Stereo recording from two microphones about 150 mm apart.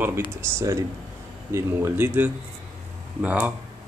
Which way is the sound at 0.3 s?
20° right (ahead or behind).